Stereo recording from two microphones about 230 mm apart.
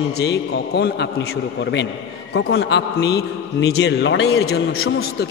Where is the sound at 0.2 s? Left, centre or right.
Left.